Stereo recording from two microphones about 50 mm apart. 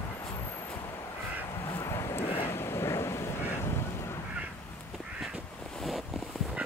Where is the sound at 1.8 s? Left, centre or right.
Left.